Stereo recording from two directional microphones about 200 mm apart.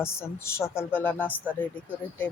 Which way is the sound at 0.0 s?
15° left (ahead or behind).